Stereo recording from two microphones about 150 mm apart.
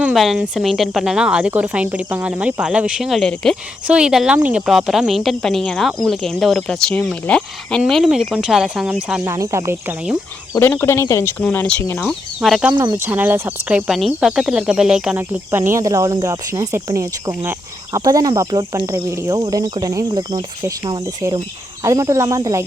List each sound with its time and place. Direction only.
0.0 s speech: centre (ahead or behind)
9.2 s speech: 20° right (ahead or behind)
10.5 s speech: 15° left (ahead or behind)
12.0 s speech: centre (ahead or behind)
12.7 s speech: 20° right (ahead or behind)
15.5 s speech: 15° right (ahead or behind)